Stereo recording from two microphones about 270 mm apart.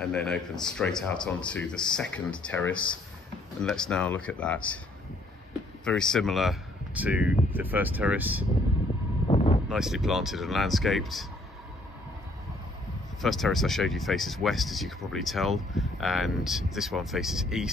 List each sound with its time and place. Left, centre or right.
0.0 s speech: centre
5.9 s speech: centre
9.3 s vehicle: left
9.7 s speech: centre
13.2 s speech: centre